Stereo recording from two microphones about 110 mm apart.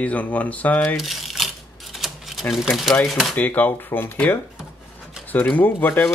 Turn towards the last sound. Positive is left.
turn(degrees=15)  # may be behind; listen again after turning